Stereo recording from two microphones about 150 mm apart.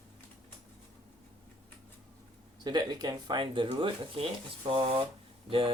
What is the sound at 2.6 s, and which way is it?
Speech, 30° right (ahead or behind).